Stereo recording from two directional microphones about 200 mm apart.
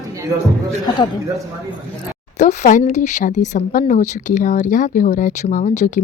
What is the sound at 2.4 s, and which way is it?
Speech, 35° left (ahead or behind).